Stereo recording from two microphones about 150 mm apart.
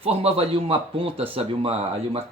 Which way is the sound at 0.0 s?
40° right (ahead or behind).